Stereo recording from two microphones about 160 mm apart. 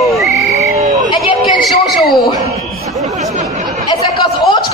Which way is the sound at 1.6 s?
Centre (ahead or behind).